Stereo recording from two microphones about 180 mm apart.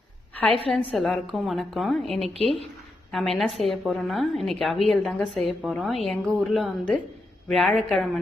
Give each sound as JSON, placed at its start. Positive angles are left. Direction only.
{"t": 0.9, "sound": "a woman's voice", "side_deg": 0}
{"t": 2.4, "sound": "speech", "side_deg": 35}
{"t": 3.1, "sound": "a woman's voice", "side_deg": 0}